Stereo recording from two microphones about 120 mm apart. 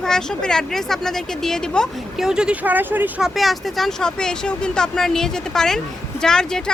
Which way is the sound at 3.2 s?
Centre (ahead or behind).